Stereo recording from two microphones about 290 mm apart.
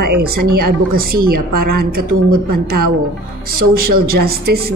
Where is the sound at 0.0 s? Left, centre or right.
Right.